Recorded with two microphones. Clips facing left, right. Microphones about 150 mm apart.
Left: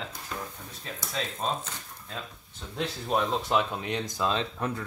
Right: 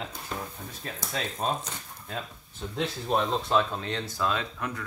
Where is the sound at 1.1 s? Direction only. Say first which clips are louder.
Right 1 dB; 10° right (ahead or behind).